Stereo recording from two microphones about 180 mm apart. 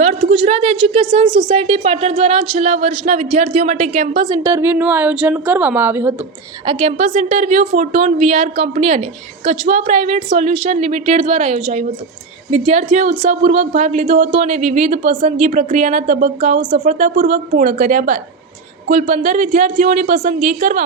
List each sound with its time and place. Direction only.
0.3 s a woman's voice: 35° right (ahead or behind)
4.3 s a woman's voice: 15° right (ahead or behind)
6.7 s a woman's voice: 30° right (ahead or behind)
16.8 s speech: 45° right (ahead or behind)